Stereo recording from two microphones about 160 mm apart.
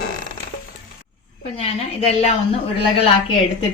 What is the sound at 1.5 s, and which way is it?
Speech, 40° left (ahead or behind).